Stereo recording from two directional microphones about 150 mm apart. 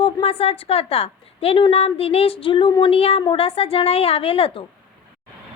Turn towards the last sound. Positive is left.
turn(degrees=40)  # may be behind; listen again after turning